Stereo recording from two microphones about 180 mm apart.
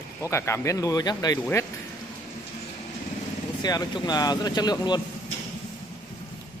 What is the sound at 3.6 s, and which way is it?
Speech, 20° left (ahead or behind).